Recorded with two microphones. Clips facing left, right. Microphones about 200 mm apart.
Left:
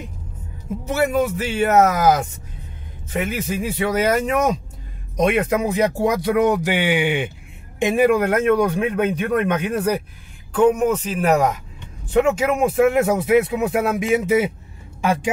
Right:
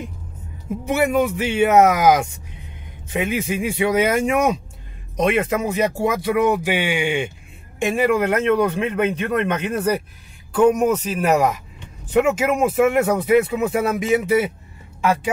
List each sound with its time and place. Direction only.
0.8 s speech: 15° right (ahead or behind)
5.1 s a man's voice: 5° left (ahead or behind)
6.6 s speech: 15° right (ahead or behind)
6.9 s speech: 20° left (ahead or behind)
9.7 s speech: centre (ahead or behind)
10.5 s speech: 10° right (ahead or behind); by 14.5 s 10° left (ahead or behind)